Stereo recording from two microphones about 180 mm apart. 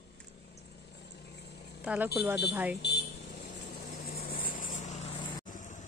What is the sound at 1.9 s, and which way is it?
Speech, 5° right (ahead or behind).